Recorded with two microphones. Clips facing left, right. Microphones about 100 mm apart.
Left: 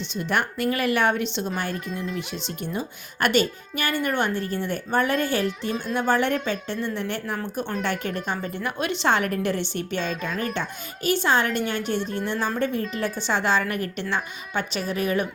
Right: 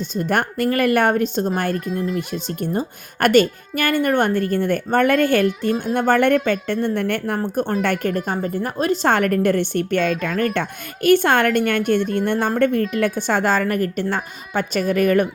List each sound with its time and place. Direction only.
0.0 s speech: 45° right (ahead or behind)